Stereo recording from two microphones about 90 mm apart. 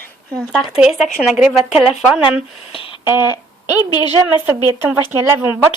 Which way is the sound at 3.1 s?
50° left (ahead or behind).